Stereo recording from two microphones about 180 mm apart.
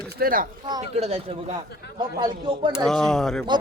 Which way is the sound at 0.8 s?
35° right (ahead or behind).